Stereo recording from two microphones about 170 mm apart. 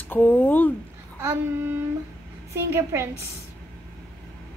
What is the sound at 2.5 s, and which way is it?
Speech, 15° right (ahead or behind).